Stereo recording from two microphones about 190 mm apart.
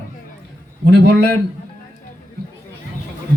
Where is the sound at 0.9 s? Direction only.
65° right (ahead or behind).